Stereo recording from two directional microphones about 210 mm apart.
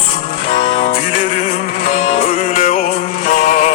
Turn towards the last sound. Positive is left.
turn(degrees=40)  # may be behind; listen again after turning